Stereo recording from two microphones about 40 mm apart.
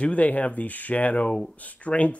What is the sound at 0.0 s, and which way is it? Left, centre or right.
Speech, left.